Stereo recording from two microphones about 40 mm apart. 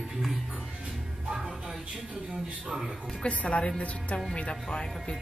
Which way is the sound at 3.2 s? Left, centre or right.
Left.